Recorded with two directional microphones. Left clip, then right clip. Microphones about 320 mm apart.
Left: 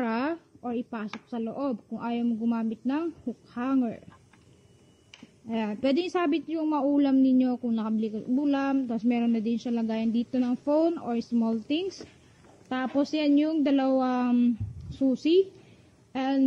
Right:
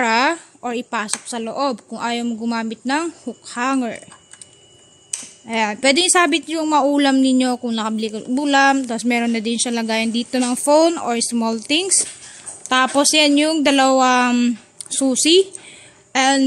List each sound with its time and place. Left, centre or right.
0.0 s speech: centre
5.5 s a woman's voice: centre